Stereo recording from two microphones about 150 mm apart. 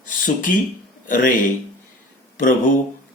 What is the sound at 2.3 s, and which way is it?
Speech, 60° left (ahead or behind).